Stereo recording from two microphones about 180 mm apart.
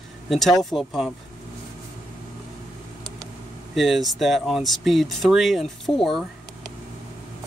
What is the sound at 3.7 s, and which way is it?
Speech, centre (ahead or behind).